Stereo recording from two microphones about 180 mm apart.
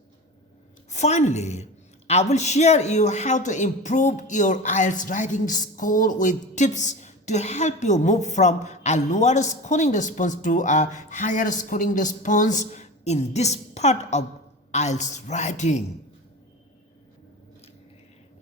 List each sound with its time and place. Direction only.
0.9 s a woman's voice: 40° left (ahead or behind)